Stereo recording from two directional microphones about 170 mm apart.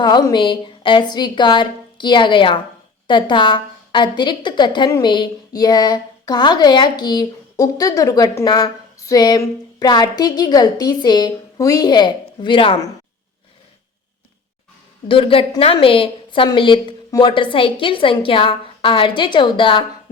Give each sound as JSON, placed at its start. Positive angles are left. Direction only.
{"t": 0.0, "sound": "a woman's voice", "side_deg": 25}
{"t": 15.0, "sound": "a woman's voice", "side_deg": 30}